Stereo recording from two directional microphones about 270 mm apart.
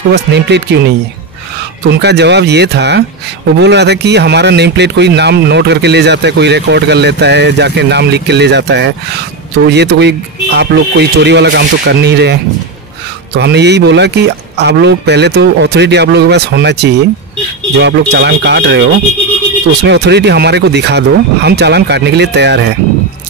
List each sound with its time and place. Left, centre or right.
0.1 s speech: right